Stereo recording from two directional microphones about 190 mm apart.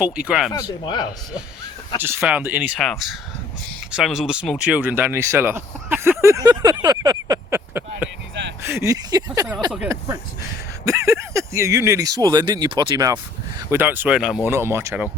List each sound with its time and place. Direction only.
0.0 s speech: 5° right (ahead or behind)
2.0 s speech: 10° right (ahead or behind)
6.2 s a sound: 20° right (ahead or behind)
8.6 s speech: 15° right (ahead or behind)
10.8 s speech: 15° right (ahead or behind)
13.7 s speech: 10° right (ahead or behind)